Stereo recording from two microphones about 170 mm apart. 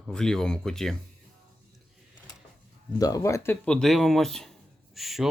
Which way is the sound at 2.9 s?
20° left (ahead or behind).